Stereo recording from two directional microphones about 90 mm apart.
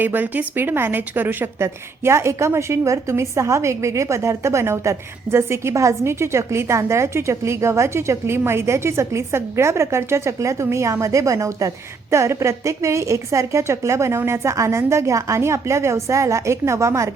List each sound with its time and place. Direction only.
0.0 s a woman's voice: 20° right (ahead or behind)